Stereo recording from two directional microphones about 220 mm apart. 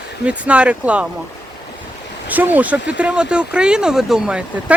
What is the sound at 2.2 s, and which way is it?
Speech, 10° right (ahead or behind).